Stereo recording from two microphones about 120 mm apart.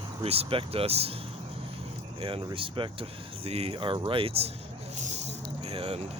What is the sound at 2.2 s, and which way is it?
Speech, 55° right (ahead or behind).